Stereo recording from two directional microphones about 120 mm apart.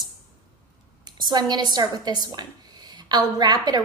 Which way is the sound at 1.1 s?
35° right (ahead or behind).